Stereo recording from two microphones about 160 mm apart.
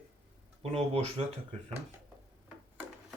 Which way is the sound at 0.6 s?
40° right (ahead or behind).